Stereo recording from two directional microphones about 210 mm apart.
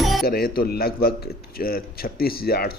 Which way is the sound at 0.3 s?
45° left (ahead or behind).